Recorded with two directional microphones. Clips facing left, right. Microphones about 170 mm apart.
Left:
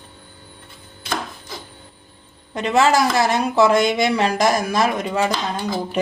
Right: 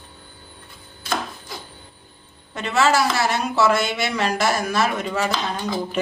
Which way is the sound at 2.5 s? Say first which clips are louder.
Left 3 dB; 15° left (ahead or behind).